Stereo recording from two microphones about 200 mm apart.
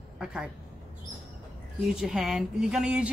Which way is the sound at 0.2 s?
5° right (ahead or behind).